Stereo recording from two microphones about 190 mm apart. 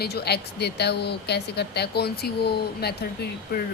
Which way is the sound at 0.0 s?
55° left (ahead or behind).